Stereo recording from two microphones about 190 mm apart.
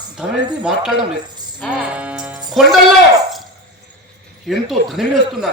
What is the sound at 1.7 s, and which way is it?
Music, 5° right (ahead or behind).